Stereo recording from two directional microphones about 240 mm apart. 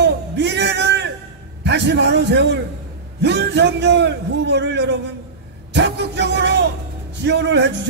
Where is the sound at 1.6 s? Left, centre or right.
Right.